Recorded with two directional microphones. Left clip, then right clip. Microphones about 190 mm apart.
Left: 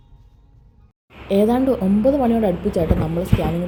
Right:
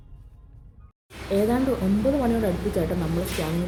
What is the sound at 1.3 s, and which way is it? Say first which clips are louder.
Speech: left 6 dB; 20° left (ahead or behind).